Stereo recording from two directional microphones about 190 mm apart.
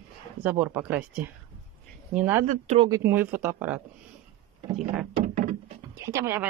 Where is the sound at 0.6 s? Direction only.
10° right (ahead or behind).